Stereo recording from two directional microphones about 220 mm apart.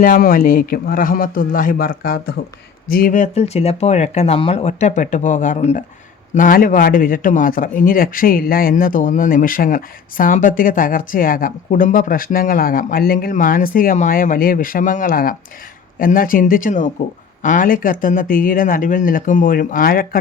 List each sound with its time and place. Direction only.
0.0 s a man's voice: 40° left (ahead or behind)